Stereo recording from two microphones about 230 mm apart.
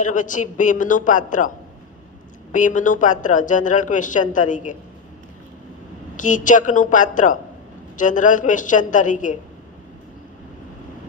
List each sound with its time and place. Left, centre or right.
0.0 s speech: left
6.1 s speech: left